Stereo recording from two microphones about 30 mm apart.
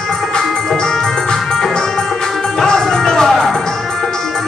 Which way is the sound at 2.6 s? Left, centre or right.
Centre.